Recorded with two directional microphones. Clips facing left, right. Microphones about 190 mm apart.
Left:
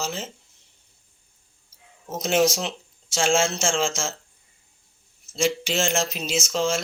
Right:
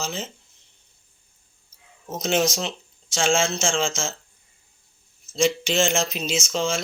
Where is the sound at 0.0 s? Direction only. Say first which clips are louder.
Even; 5° left (ahead or behind).